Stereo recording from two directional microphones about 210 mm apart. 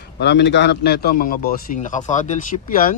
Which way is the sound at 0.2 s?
55° left (ahead or behind).